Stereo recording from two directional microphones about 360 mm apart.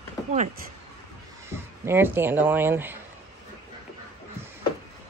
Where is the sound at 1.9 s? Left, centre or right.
Centre.